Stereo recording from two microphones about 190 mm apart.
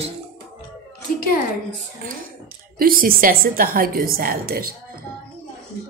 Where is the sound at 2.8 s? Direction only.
50° right (ahead or behind).